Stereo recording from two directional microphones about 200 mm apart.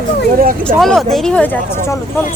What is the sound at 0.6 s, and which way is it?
Speech, centre (ahead or behind).